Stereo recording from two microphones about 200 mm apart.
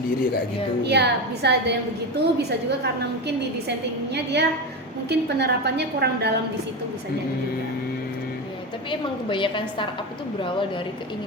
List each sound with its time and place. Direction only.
0.9 s a woman's voice: 55° right (ahead or behind)
4.1 s a woman's voice: 60° right (ahead or behind)
8.9 s a woman's voice: 25° left (ahead or behind)